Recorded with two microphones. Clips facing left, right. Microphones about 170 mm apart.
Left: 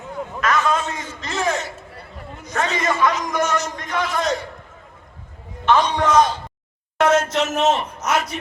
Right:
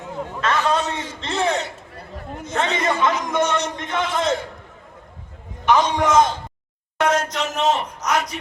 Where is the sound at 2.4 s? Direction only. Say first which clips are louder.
Even; 25° right (ahead or behind).